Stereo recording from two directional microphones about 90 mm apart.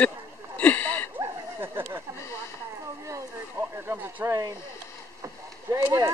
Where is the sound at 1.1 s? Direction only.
25° right (ahead or behind).